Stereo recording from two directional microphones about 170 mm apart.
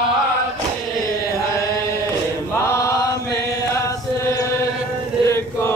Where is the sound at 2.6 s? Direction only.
20° left (ahead or behind).